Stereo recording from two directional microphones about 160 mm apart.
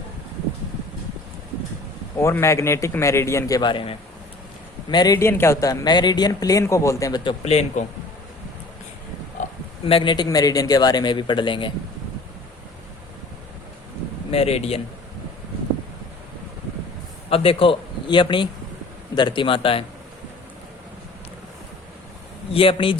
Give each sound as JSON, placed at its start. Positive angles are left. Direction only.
{"t": 2.2, "sound": "speech", "side_deg": 20}
{"t": 7.4, "sound": "speech", "side_deg": 45}
{"t": 9.8, "sound": "speech", "side_deg": 35}
{"t": 14.3, "sound": "a man's voice", "side_deg": 40}
{"t": 17.2, "sound": "a man's voice", "side_deg": 35}
{"t": 22.5, "sound": "a man's voice", "side_deg": 35}